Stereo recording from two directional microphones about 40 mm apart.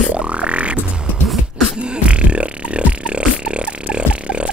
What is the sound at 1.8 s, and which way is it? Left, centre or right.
Burping, right.